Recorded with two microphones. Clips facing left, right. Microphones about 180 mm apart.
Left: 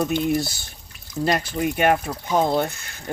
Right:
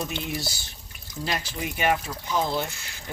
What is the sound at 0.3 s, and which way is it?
Speech, 55° left (ahead or behind).